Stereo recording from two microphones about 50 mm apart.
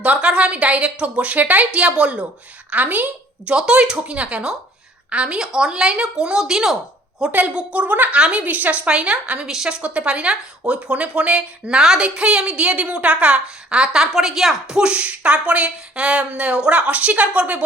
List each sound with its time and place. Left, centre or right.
0.0 s a woman's voice: right
3.5 s a woman's voice: right
7.3 s a woman's voice: right
8.4 s a woman's voice: right
8.9 s a woman's voice: right
9.5 s a woman's voice: centre